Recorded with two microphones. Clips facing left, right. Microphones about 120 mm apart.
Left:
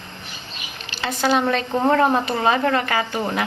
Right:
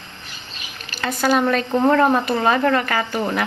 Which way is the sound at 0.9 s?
25° left (ahead or behind).